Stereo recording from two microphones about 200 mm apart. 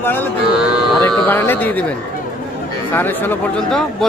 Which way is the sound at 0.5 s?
Centre (ahead or behind).